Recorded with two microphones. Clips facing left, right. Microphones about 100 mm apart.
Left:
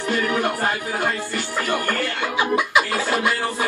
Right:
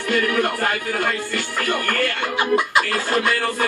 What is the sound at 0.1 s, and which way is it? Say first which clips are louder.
Music: right 2 dB; 20° left (ahead or behind).